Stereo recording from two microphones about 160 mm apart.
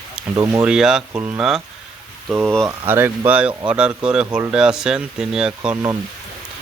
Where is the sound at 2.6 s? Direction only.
15° right (ahead or behind).